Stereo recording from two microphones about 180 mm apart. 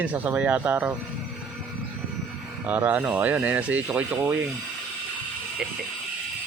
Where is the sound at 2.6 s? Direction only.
10° right (ahead or behind).